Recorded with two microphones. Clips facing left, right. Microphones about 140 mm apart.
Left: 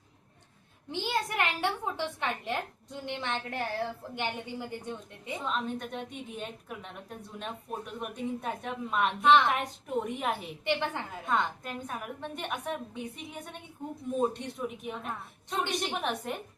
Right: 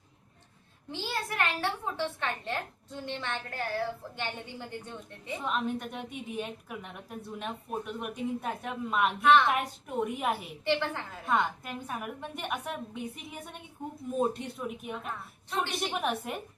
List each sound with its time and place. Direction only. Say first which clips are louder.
0.9 s a woman's voice: left 3 dB; 15° left (ahead or behind)
5.5 s a woman's voice: right 2 dB; 5° right (ahead or behind)
10.7 s a woman's voice: right 1 dB; 15° left (ahead or behind)
11.3 s a woman's voice: right 2 dB; 10° right (ahead or behind)
15.4 s a woman's voice: even; 15° left (ahead or behind)
16.0 s a woman's voice: right 1 dB; 5° right (ahead or behind)